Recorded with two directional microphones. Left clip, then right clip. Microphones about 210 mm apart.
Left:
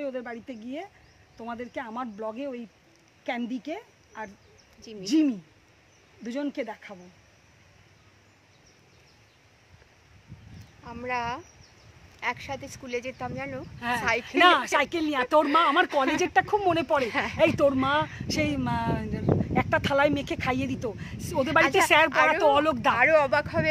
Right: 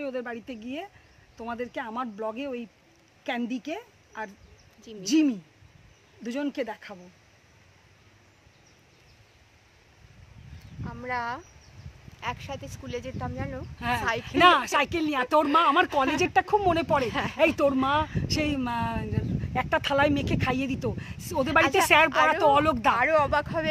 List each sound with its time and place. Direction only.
0.0 s a woman's voice: 10° right (ahead or behind)
10.8 s speech: 15° left (ahead or behind)
13.7 s speech: 10° right (ahead or behind)
17.0 s speech: 15° left (ahead or behind)
17.4 s speech: 10° right (ahead or behind)
22.1 s speech: 15° left (ahead or behind)
22.4 s speech: 10° right (ahead or behind)
22.9 s speech: 15° left (ahead or behind)